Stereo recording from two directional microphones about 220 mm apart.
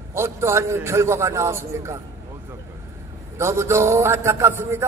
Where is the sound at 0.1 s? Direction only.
10° right (ahead or behind).